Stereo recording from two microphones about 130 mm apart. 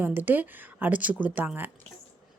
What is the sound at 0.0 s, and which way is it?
A woman's voice, 15° right (ahead or behind).